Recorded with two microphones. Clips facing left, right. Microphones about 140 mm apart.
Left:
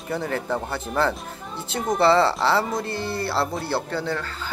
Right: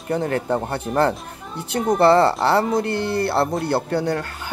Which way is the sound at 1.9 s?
55° right (ahead or behind).